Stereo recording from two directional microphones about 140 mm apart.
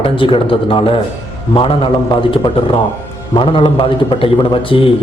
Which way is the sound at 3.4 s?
35° left (ahead or behind).